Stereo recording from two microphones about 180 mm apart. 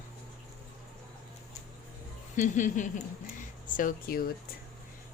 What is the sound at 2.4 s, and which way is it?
Speech, 45° left (ahead or behind).